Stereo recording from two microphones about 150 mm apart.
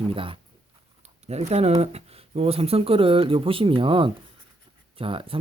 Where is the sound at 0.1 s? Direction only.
35° right (ahead or behind).